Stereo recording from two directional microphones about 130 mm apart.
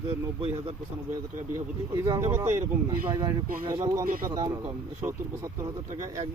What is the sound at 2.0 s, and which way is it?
Speech, 25° right (ahead or behind).